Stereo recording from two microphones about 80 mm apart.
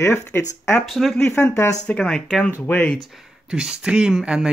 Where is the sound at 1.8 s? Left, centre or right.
Centre.